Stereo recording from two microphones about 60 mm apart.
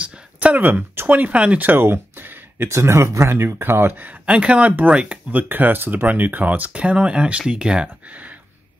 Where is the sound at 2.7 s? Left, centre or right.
Right.